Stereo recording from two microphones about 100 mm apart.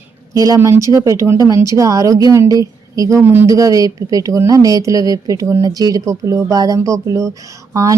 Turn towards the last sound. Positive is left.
turn(degrees=-35)  # may be behind; listen again after turning